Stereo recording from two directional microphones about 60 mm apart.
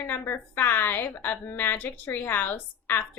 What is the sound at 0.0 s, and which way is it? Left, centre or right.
Speech, left.